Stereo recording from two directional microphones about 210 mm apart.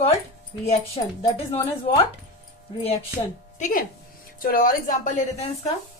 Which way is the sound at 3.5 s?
40° left (ahead or behind).